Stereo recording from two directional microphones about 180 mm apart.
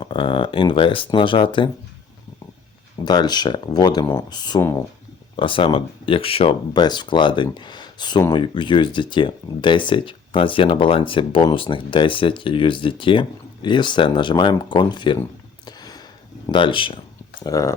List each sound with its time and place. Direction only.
0.0 s speech: 30° left (ahead or behind)
3.0 s speech: 20° left (ahead or behind)
15.6 s a sound: 20° left (ahead or behind)
16.5 s speech: 25° left (ahead or behind)
17.4 s speech: 20° left (ahead or behind)